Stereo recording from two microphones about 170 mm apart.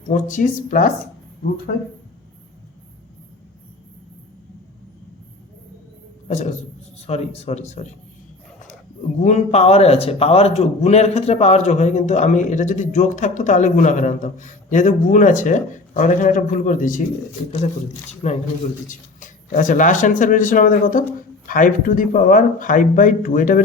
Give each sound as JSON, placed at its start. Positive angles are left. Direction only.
{"t": 0.1, "sound": "a man's voice", "side_deg": 50}
{"t": 6.2, "sound": "a sound", "side_deg": 45}
{"t": 7.1, "sound": "speech", "side_deg": 40}
{"t": 9.2, "sound": "a man's voice", "side_deg": 40}